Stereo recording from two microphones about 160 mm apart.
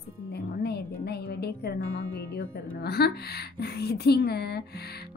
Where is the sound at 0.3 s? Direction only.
85° left.